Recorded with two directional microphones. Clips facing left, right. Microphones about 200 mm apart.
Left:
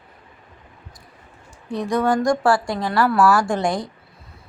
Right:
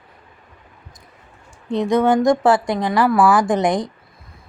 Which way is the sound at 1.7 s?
20° right (ahead or behind).